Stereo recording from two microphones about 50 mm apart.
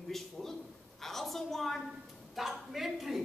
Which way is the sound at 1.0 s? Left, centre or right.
Centre.